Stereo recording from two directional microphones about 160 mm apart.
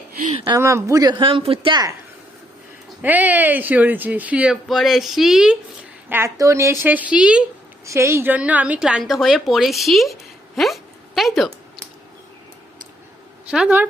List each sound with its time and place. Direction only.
0.4 s speech: 20° right (ahead or behind)
1.2 s speech: 35° right (ahead or behind)
3.0 s speech: 10° right (ahead or behind)
6.1 s speech: 15° right (ahead or behind)
7.9 s a woman's voice: 15° right (ahead or behind); by 11.5 s centre (ahead or behind)
13.5 s speech: 5° right (ahead or behind)